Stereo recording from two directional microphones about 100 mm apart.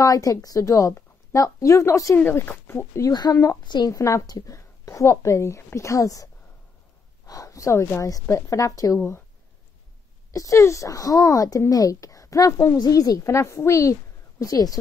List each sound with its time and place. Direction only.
0.0 s a woman's voice: 35° left (ahead or behind)
2.1 s speech: 20° left (ahead or behind)
3.1 s speech: 45° left (ahead or behind)
3.9 s speech: 35° left (ahead or behind)
10.3 s speech: 30° left (ahead or behind)